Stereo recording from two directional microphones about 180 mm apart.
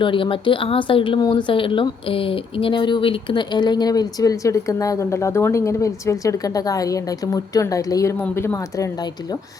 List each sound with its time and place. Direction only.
0.0 s speech: 30° left (ahead or behind)